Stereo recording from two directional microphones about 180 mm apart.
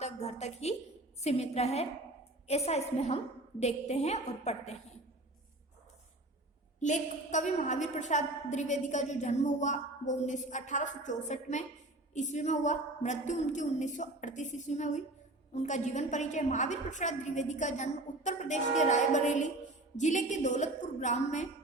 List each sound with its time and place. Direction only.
0.0 s a woman's voice: 40° left (ahead or behind)
6.7 s a woman's voice: 40° left (ahead or behind)